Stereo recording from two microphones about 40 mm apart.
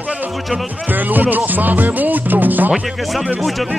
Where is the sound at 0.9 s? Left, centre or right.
Right.